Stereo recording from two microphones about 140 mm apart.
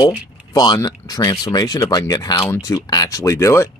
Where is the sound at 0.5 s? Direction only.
30° left (ahead or behind).